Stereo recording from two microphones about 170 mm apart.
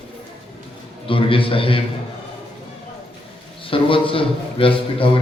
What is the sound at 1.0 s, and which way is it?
Speech, 30° left (ahead or behind).